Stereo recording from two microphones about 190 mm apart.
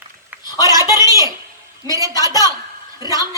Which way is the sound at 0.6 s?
15° right (ahead or behind).